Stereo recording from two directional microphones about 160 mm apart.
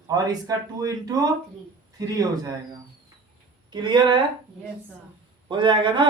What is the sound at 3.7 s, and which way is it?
Speech, 30° right (ahead or behind).